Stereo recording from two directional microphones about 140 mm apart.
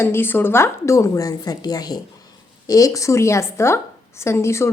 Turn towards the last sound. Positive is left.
turn(degrees=20)  # may be behind; listen again after turning